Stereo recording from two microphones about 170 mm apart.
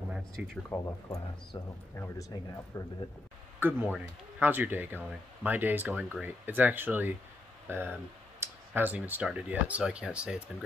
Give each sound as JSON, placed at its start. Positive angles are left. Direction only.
{"t": 0.7, "sound": "speech", "side_deg": 15}
{"t": 3.5, "sound": "speech", "side_deg": -10}